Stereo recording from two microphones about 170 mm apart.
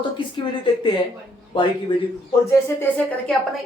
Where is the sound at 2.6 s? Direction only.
15° left (ahead or behind).